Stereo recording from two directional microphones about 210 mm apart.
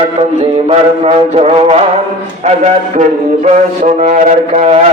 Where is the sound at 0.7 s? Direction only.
30° right (ahead or behind).